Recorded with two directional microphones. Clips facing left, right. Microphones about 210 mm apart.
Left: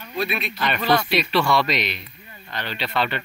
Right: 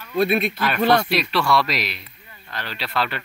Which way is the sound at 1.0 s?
Centre (ahead or behind).